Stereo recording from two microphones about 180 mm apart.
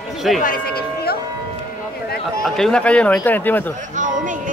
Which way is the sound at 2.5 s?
5° left (ahead or behind).